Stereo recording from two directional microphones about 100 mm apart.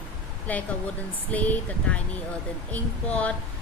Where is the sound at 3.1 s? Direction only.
15° left (ahead or behind).